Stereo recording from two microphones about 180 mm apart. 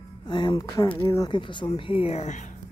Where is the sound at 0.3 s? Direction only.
25° left (ahead or behind).